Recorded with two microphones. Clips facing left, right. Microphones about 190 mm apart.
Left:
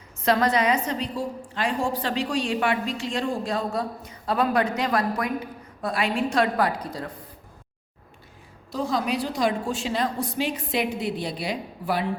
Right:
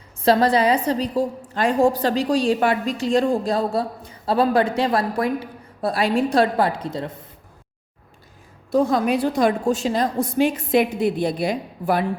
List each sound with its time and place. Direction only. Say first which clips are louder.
0.3 s a woman's voice: right 5 dB; 30° right (ahead or behind)
8.7 s a woman's voice: right 7 dB; 55° right (ahead or behind)